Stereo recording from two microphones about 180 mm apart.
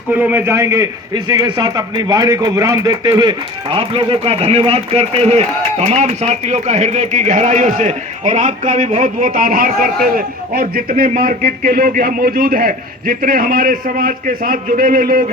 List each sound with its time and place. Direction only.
0.1 s a man's voice: 10° right (ahead or behind); by 15.2 s 50° right (ahead or behind)